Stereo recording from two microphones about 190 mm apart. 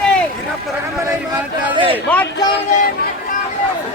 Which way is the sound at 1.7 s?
25° right (ahead or behind).